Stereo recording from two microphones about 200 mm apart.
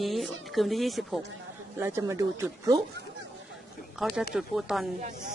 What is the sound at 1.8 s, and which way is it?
Speech, 10° right (ahead or behind).